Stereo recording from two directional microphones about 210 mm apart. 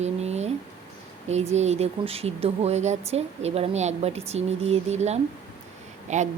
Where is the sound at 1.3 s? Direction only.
30° right (ahead or behind).